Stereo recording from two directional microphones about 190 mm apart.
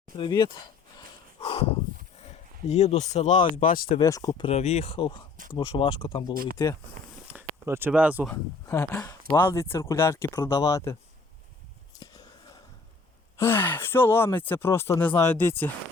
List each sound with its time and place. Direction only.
0.2 s a sound: 25° left (ahead or behind)
2.6 s speech: 35° left (ahead or behind)
4.0 s speech: 20° left (ahead or behind)
6.3 s speech: 50° right (ahead or behind)
7.3 s speech: 10° right (ahead or behind)
8.6 s speech: 15° left (ahead or behind)
11.9 s a sound: 20° left (ahead or behind)
13.3 s speech: 10° left (ahead or behind)